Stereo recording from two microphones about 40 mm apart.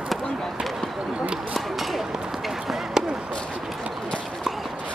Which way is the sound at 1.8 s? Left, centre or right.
Centre.